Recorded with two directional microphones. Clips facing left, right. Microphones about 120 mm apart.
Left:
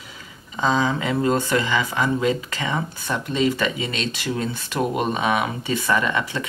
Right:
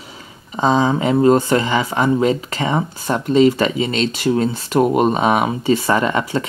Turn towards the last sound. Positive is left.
turn(degrees=-35)  # may be behind; listen again after turning